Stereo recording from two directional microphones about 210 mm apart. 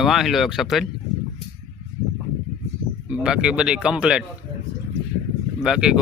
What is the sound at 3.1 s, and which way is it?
Speech, 5° right (ahead or behind).